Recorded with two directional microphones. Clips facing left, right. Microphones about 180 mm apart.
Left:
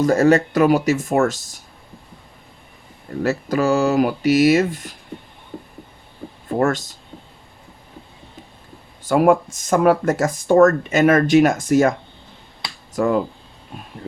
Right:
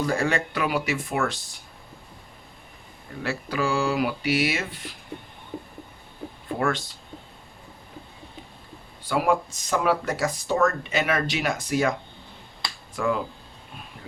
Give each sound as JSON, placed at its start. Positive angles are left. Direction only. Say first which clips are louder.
{"t": 0.0, "sound": "speech", "louder": "left 10 dB", "side_deg": 40}
{"t": 3.2, "sound": "speech", "louder": "left 8 dB", "side_deg": 45}
{"t": 5.5, "sound": "a sound", "louder": "left 1 dB", "side_deg": -5}
{"t": 6.6, "sound": "speech", "louder": "left 7 dB", "side_deg": 45}
{"t": 9.0, "sound": "speech", "louder": "left 8 dB", "side_deg": 50}
{"t": 13.0, "sound": "speech", "louder": "left 7 dB", "side_deg": 40}